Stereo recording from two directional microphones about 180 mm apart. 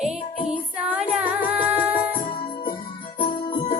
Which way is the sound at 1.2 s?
10° right (ahead or behind).